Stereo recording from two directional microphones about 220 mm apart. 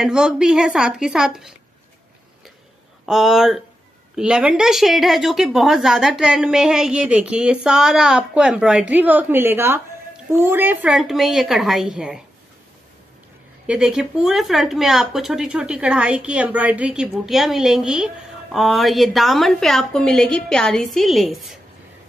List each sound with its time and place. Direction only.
0.0 s speech: 5° right (ahead or behind)
3.1 s speech: centre (ahead or behind)
13.7 s speech: 5° right (ahead or behind)